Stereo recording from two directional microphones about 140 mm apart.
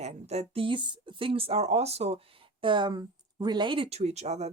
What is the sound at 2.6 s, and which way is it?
Speech, 35° right (ahead or behind).